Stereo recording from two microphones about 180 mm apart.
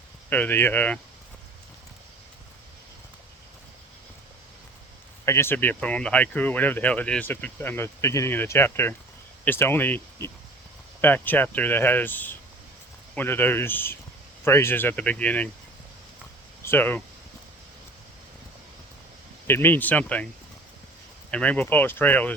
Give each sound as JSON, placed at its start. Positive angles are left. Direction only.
{"t": 0.3, "sound": "speech", "side_deg": 10}
{"t": 5.2, "sound": "speech", "side_deg": 15}
{"t": 16.6, "sound": "speech", "side_deg": 10}
{"t": 19.5, "sound": "speech", "side_deg": 10}
{"t": 21.2, "sound": "speech", "side_deg": 5}